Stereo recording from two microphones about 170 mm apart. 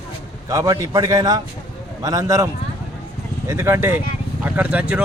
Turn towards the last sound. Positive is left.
turn(degrees=-10)  # may be behind; listen again after turning